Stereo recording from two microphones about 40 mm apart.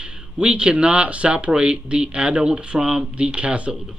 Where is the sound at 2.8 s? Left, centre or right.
Centre.